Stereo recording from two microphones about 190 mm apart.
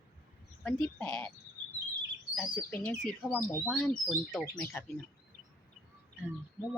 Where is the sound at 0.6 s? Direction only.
5° left (ahead or behind).